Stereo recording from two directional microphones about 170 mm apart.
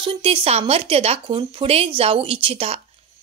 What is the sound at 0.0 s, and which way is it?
A woman's voice, 30° right (ahead or behind).